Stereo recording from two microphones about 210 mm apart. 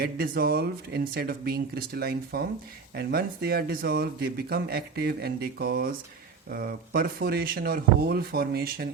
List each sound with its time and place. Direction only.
0.0 s speech: 45° right (ahead or behind)